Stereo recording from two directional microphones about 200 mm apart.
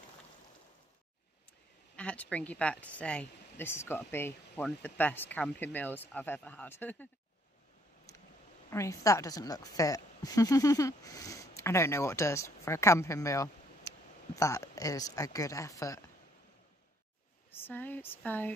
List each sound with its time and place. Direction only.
2.0 s a woman's voice: 5° left (ahead or behind)
8.1 s a sound: 15° left (ahead or behind)
8.6 s a woman's voice: 15° left (ahead or behind)
17.6 s a woman's voice: 10° left (ahead or behind)